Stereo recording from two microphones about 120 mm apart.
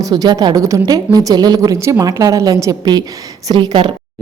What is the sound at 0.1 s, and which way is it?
Speech, 35° right (ahead or behind).